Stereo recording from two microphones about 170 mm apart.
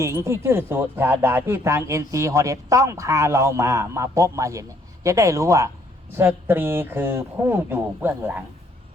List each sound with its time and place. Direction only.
0.0 s speech: 15° right (ahead or behind)